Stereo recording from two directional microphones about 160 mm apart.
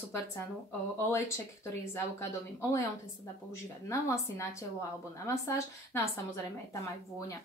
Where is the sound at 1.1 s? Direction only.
15° left (ahead or behind).